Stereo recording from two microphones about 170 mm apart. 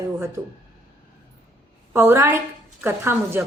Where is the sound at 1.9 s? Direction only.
15° right (ahead or behind).